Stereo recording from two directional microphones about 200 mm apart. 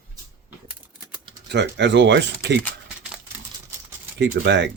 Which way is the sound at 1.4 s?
60° right (ahead or behind).